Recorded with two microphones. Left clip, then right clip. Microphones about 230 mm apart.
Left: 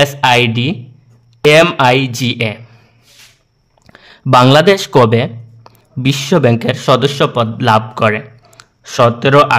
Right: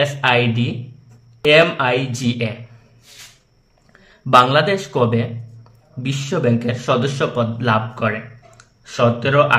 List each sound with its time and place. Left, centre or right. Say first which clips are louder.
0.0 s speech: left 6 dB; left
3.8 s speech: left 9 dB; left